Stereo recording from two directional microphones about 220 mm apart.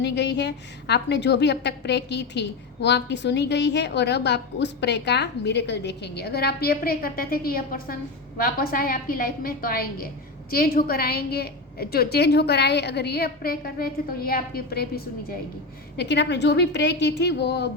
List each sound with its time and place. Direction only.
0.0 s a woman's voice: 50° left (ahead or behind)